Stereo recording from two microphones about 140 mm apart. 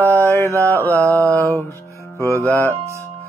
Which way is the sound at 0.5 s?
20° right (ahead or behind).